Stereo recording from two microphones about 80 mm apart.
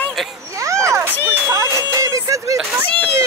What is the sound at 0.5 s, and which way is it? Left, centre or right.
A woman's voice, right.